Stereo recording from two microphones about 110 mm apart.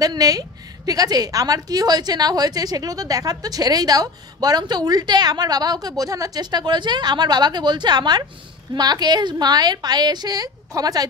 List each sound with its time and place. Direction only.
0.0 s a woman's voice: 35° right (ahead or behind)